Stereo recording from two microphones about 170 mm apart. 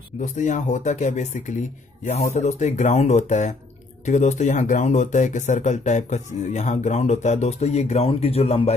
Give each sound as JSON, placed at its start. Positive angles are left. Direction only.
{"t": 0.2, "sound": "speech", "side_deg": 45}